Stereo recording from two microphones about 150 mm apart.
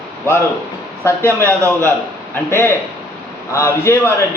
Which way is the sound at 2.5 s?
15° left (ahead or behind).